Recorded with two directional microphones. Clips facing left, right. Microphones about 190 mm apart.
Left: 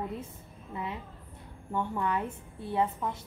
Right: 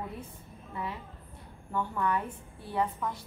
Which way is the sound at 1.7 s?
20° left (ahead or behind).